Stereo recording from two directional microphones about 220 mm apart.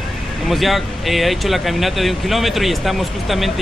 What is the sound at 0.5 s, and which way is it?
Speech, centre (ahead or behind).